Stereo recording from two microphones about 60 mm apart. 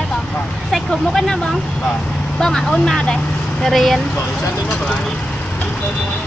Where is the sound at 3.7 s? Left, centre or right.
Centre.